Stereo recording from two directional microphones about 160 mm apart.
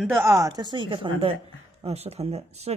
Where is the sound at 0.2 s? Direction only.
20° right (ahead or behind).